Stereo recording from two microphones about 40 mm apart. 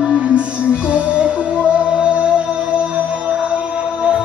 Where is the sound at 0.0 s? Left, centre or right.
Right.